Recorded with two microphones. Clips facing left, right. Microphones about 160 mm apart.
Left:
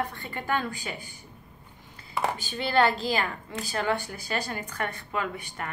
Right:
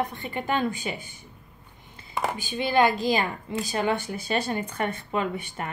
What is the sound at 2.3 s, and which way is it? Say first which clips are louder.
A woman's voice: right 3 dB; 15° right (ahead or behind).